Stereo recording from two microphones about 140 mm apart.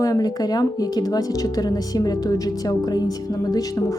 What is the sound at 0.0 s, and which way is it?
Speech, 25° left (ahead or behind).